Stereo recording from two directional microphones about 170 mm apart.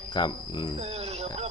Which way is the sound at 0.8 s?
35° right (ahead or behind).